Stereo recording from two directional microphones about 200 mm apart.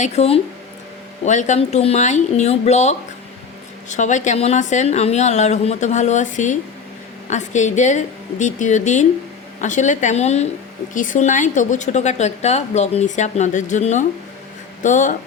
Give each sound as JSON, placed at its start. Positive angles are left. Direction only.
{"t": 0.0, "sound": "speech", "side_deg": 30}